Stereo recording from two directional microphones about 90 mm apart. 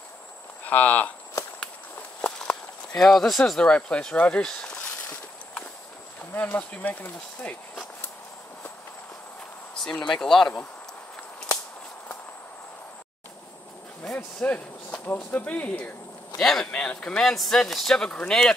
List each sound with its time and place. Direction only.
0.7 s speech: 15° left (ahead or behind)
2.2 s walk: 15° left (ahead or behind)
3.0 s speech: 5° left (ahead or behind)
6.3 s speech: 20° left (ahead or behind)
9.8 s speech: 10° left (ahead or behind)
14.1 s speech: 15° left (ahead or behind)
16.3 s speech: 5° left (ahead or behind)